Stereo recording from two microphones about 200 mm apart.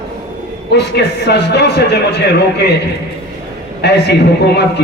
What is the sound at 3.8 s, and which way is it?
Speech, 55° left (ahead or behind).